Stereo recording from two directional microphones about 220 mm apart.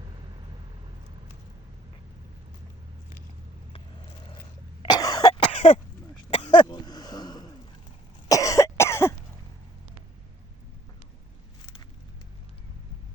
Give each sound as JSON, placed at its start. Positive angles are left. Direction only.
{"t": 4.8, "sound": "cough", "side_deg": 20}
{"t": 6.3, "sound": "a sound", "side_deg": 20}
{"t": 8.3, "sound": "cough", "side_deg": 15}